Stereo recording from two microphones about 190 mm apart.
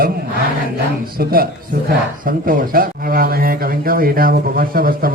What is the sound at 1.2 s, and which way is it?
Speech, 50° right (ahead or behind).